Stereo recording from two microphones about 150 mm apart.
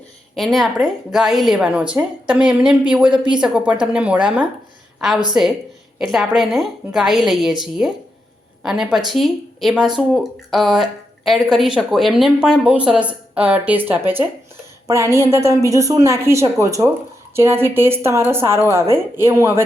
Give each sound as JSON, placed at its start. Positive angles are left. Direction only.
{"t": 0.3, "sound": "a woman's voice", "side_deg": 0}